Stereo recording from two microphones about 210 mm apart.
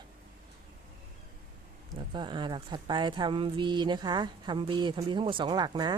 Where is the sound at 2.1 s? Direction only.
20° right (ahead or behind).